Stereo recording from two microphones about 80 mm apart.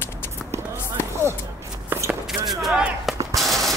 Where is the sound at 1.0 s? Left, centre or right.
Left.